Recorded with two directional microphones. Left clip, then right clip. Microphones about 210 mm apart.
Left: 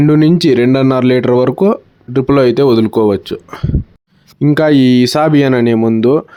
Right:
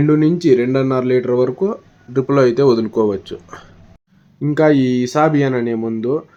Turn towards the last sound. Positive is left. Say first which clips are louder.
# left 9 dB
turn(degrees=40)  # may be behind; listen again after turning